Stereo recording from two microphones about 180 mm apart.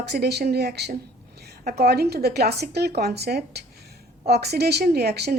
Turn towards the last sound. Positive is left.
turn(degrees=-65)  # may be behind; listen again after turning